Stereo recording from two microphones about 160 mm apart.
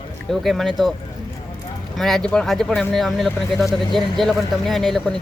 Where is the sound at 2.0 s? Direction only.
Centre (ahead or behind).